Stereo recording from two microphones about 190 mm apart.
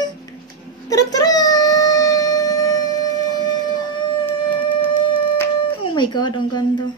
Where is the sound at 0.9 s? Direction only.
20° left (ahead or behind).